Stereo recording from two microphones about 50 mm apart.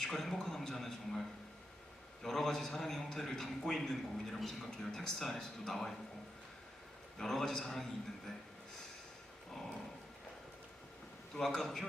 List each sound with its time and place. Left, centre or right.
0.0 s a man's voice: centre
2.2 s a man's voice: centre
7.2 s a man's voice: centre
11.3 s a man's voice: centre